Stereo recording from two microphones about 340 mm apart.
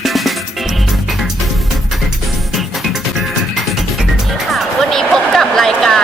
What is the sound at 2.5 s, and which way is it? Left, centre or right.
Music, centre.